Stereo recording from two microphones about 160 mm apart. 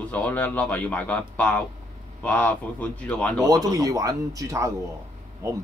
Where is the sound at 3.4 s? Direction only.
25° right (ahead or behind).